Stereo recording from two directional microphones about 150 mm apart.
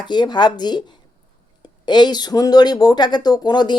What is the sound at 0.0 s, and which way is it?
Speech, 30° left (ahead or behind).